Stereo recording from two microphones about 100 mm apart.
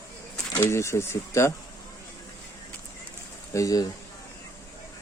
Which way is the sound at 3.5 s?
35° left (ahead or behind).